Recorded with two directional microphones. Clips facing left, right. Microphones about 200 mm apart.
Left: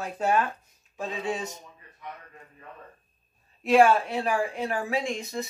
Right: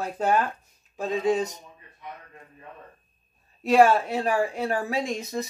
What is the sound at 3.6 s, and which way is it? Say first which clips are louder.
Speech: right 1 dB; 40° right (ahead or behind).